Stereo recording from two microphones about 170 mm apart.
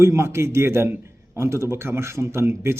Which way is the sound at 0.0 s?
15° right (ahead or behind).